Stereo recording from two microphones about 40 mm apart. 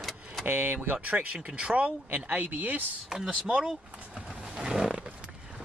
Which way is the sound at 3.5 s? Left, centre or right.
Right.